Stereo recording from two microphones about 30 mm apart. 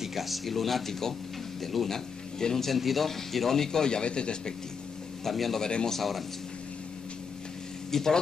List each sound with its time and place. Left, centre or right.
0.0 s speech: centre
2.3 s speech: centre
2.7 s speech: centre
3.1 s speech: centre; by 4.6 s left
5.2 s speech: centre
7.9 s speech: centre